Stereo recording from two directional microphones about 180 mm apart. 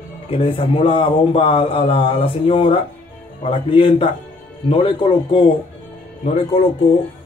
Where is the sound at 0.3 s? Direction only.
30° left (ahead or behind).